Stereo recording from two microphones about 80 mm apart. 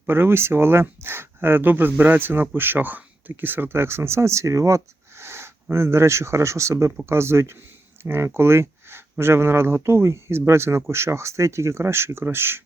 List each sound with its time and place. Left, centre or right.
0.1 s speech: right